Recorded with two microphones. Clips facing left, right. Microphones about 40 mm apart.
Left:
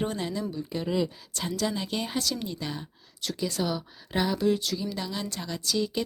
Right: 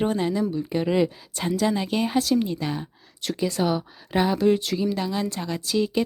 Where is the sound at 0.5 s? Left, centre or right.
Right.